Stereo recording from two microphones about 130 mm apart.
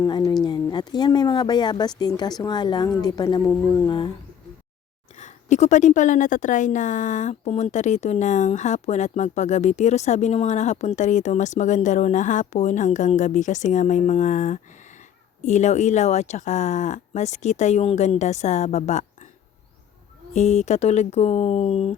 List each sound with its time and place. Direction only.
0.4 s speech: 35° left (ahead or behind)
5.1 s speech: 65° left (ahead or behind)
20.3 s speech: 60° left (ahead or behind)